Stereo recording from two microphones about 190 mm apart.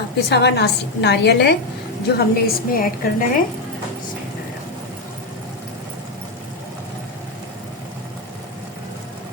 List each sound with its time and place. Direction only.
0.2 s a woman's voice: 60° left (ahead or behind)
2.1 s a woman's voice: 50° left (ahead or behind)